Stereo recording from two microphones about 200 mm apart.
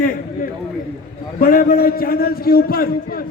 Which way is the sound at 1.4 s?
45° left (ahead or behind).